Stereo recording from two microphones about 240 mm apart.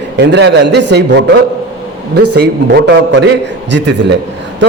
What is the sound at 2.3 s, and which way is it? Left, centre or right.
A man's voice, right.